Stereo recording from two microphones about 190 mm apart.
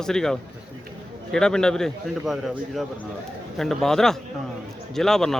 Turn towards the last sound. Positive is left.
turn(degrees=0)  # may be behind; listen again after turning